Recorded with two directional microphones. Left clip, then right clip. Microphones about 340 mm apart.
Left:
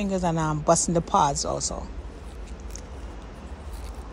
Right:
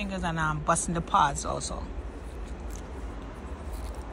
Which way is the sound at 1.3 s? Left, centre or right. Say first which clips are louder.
Left 5 dB; centre.